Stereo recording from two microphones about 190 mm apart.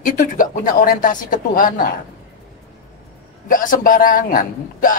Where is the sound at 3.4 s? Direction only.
45° left (ahead or behind).